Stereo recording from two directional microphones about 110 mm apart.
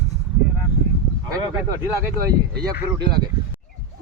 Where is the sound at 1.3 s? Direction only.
30° right (ahead or behind).